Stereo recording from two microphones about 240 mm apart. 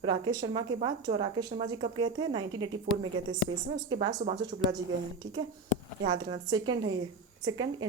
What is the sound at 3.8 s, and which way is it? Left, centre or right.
Speech, centre.